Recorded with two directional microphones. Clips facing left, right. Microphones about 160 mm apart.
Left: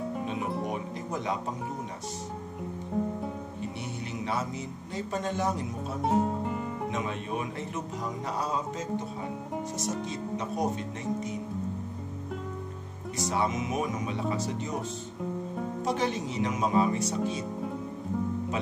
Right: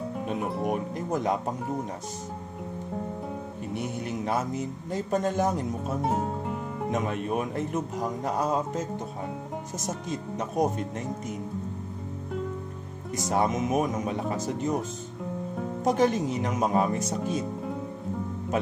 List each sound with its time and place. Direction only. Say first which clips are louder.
0.7 s music: right 5 dB; 50° right (ahead or behind)
3.7 s a man's voice: right 5 dB; 50° right (ahead or behind)
6.0 s music: left 4 dB; centre (ahead or behind)
6.9 s a man's voice: right 8 dB; 50° right (ahead or behind)
9.8 s a man's voice: even; 45° right (ahead or behind)
13.3 s a man's voice: right 5 dB; 45° right (ahead or behind)
15.8 s a man's voice: right 7 dB; 45° right (ahead or behind)